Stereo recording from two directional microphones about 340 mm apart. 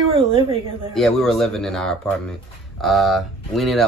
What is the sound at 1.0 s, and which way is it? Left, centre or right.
Speech, centre.